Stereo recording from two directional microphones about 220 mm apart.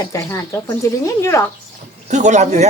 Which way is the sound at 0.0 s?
15° left (ahead or behind).